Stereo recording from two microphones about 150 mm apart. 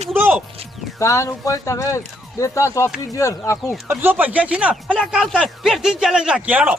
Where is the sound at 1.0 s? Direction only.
20° left (ahead or behind).